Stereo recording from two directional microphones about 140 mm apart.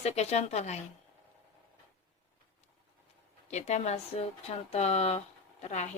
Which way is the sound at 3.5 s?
55° left (ahead or behind).